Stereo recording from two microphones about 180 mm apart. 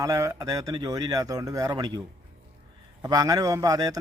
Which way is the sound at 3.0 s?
20° right (ahead or behind).